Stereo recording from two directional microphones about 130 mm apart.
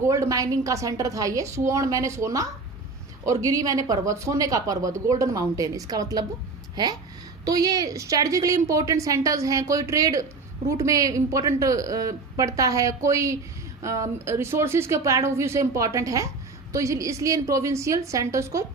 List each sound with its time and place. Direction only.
0.0 s speech: 25° right (ahead or behind)
7.4 s speech: 30° right (ahead or behind)